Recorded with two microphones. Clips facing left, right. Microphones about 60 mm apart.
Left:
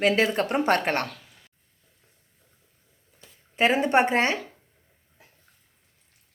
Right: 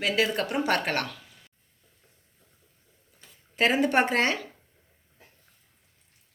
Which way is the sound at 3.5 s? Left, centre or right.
Left.